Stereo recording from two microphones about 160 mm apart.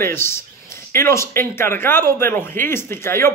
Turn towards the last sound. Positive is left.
turn(degrees=15)  # may be behind; listen again after turning